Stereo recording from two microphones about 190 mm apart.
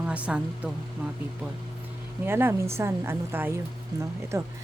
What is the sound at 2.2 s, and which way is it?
Speech, 10° right (ahead or behind).